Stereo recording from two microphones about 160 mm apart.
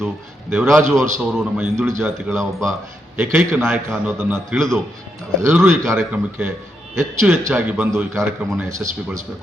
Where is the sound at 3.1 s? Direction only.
15° right (ahead or behind).